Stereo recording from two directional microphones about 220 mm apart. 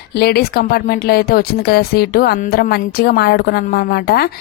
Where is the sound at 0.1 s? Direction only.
45° left (ahead or behind).